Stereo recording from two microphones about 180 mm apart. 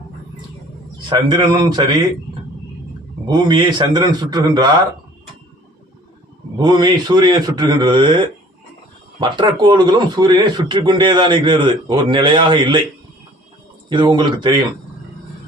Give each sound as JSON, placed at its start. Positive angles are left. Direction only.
{"t": 1.1, "sound": "a man's voice", "side_deg": -20}
{"t": 3.2, "sound": "a man's voice", "side_deg": -25}
{"t": 6.6, "sound": "a man's voice", "side_deg": -25}
{"t": 9.2, "sound": "a man's voice", "side_deg": -25}
{"t": 13.9, "sound": "a man's voice", "side_deg": -25}